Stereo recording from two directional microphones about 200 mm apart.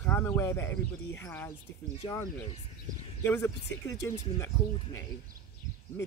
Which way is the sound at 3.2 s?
15° left (ahead or behind).